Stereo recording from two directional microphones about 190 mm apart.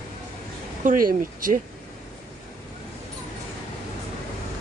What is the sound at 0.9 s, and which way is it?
Speech, 45° right (ahead or behind).